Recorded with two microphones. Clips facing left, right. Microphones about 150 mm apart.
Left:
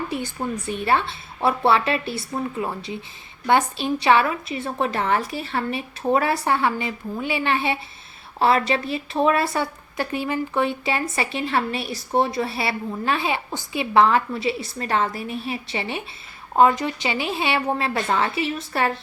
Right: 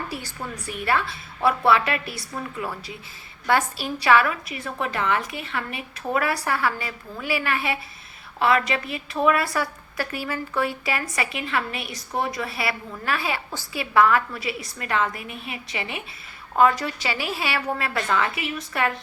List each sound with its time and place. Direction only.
0.1 s a woman's voice: 20° left (ahead or behind)